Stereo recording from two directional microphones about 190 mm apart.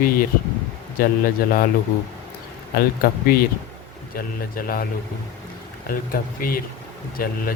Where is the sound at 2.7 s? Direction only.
50° left (ahead or behind).